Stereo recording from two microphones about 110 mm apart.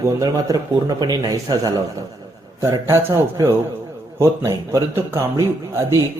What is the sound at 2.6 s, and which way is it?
Speech, 25° right (ahead or behind).